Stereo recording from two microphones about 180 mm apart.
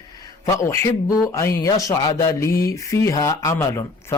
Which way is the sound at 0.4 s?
15° left (ahead or behind).